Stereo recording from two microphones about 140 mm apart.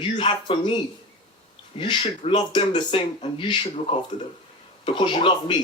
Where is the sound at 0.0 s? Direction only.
35° left (ahead or behind).